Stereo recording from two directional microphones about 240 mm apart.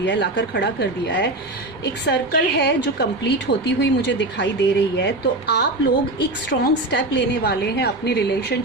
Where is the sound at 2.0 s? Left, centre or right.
Left.